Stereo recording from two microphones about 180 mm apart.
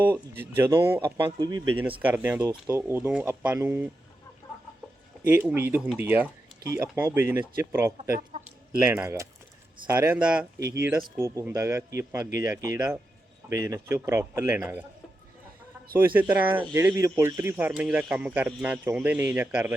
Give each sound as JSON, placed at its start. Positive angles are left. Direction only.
{"t": 0.0, "sound": "speech", "side_deg": -10}
{"t": 1.0, "sound": "speech", "side_deg": -25}
{"t": 2.0, "sound": "speech", "side_deg": -10}
{"t": 5.2, "sound": "speech", "side_deg": -10}
{"t": 8.3, "sound": "chicken", "side_deg": -40}
{"t": 8.9, "sound": "speech", "side_deg": -10}
{"t": 11.2, "sound": "speech", "side_deg": -15}
{"t": 16.1, "sound": "speech", "side_deg": -10}